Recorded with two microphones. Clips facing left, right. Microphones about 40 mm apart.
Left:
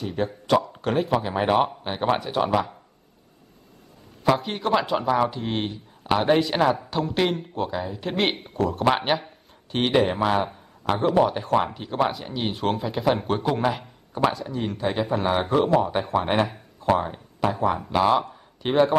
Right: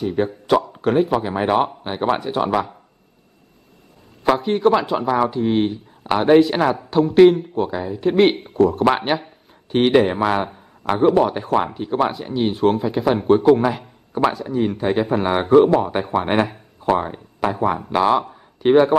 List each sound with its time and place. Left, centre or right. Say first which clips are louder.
0.0 s speech: right 6 dB; centre
4.2 s speech: right 6 dB; centre
14.1 s speech: right 5 dB; centre